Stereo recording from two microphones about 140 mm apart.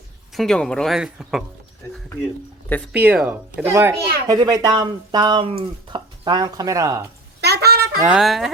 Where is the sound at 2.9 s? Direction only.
5° right (ahead or behind).